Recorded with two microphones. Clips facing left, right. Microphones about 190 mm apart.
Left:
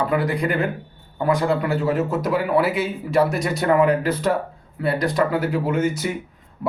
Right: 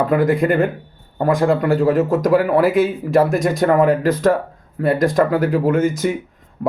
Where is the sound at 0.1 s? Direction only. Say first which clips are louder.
Right 6 dB; 50° right (ahead or behind).